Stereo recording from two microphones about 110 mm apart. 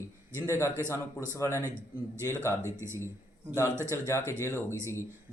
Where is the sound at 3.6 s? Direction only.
25° right (ahead or behind).